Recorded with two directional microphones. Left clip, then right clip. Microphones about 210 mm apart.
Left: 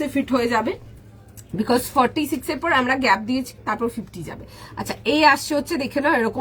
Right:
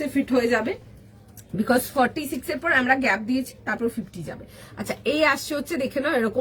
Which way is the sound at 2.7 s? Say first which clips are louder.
Left 2 dB; 15° left (ahead or behind).